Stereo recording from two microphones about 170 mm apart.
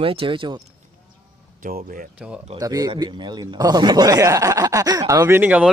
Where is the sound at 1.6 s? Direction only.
60° right (ahead or behind).